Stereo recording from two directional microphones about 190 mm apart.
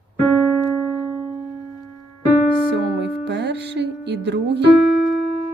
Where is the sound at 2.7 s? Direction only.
65° right (ahead or behind).